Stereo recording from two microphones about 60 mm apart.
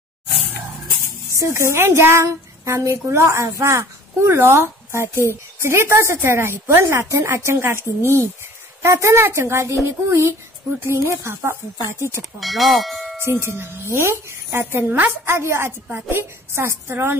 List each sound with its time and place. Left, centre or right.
1.3 s a woman's voice: right
12.4 s speech: centre
13.2 s a woman's voice: right